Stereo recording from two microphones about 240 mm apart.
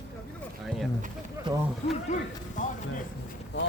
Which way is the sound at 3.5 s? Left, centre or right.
Left.